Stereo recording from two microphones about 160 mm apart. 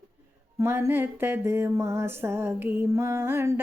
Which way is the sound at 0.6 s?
15° right (ahead or behind).